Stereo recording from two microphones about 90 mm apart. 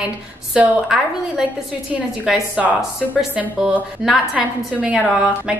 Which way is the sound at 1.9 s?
5° right (ahead or behind).